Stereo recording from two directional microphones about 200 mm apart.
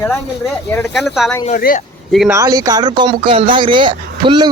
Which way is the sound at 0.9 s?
Centre (ahead or behind).